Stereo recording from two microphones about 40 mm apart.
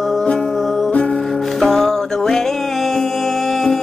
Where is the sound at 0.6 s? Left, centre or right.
Centre.